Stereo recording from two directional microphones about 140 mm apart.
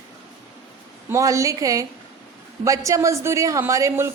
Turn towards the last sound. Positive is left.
turn(degrees=-20)  # may be behind; listen again after turning